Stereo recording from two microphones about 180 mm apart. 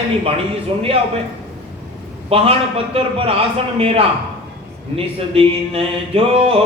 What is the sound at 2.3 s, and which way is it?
A man's voice, 35° right (ahead or behind).